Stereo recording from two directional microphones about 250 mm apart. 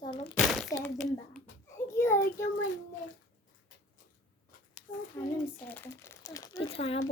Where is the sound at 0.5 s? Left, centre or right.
Centre.